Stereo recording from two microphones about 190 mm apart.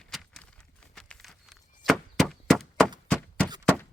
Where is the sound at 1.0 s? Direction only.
5° left (ahead or behind).